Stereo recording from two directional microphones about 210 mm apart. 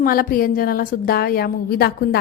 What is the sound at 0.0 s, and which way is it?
A woman's voice, 45° left (ahead or behind).